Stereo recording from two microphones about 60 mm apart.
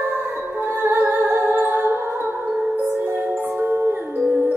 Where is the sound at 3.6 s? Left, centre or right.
Right.